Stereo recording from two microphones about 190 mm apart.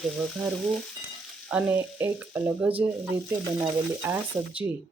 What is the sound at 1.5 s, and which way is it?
Speech, 5° right (ahead or behind).